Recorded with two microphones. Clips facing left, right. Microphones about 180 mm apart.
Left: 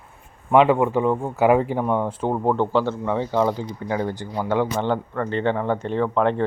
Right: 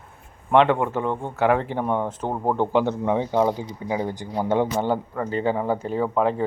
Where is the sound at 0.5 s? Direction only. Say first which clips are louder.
Left 2 dB; 5° left (ahead or behind); by 4.7 s 20° right (ahead or behind).